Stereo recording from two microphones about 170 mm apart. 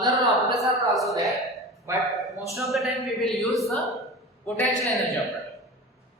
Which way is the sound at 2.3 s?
20° left (ahead or behind).